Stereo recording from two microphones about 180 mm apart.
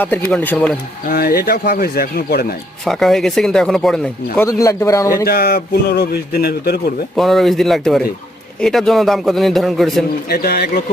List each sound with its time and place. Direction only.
0.0 s speech: 10° left (ahead or behind)
1.0 s a man's voice: 60° left (ahead or behind)
2.8 s speech: centre (ahead or behind)
4.4 s speech: 20° left (ahead or behind)
5.2 s a man's voice: 60° left (ahead or behind)
7.2 s speech: centre (ahead or behind)
10.2 s a man's voice: 60° left (ahead or behind)